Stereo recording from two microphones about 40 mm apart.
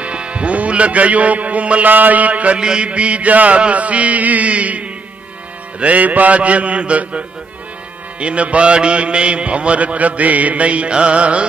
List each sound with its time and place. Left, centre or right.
0.0 s music: right
1.9 s mantra: right
2.6 s mantra: right